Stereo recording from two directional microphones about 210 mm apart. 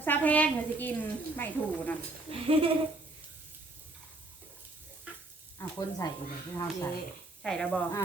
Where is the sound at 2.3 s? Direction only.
25° right (ahead or behind).